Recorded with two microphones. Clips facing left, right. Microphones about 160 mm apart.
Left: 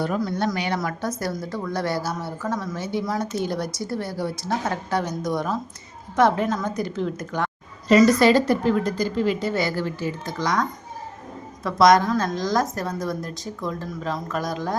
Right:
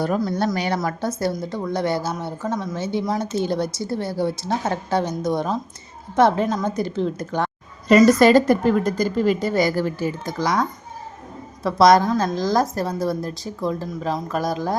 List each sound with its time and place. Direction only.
0.2 s a woman's voice: 30° right (ahead or behind)
0.4 s a woman's voice: 40° right (ahead or behind)
0.8 s a woman's voice: 25° right (ahead or behind)
7.9 s a woman's voice: 50° right (ahead or behind); by 14.8 s 35° right (ahead or behind)